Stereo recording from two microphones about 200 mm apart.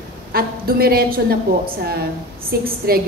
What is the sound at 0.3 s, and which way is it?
A woman's voice, 50° right (ahead or behind).